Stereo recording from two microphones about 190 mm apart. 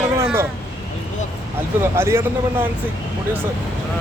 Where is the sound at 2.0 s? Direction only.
15° right (ahead or behind).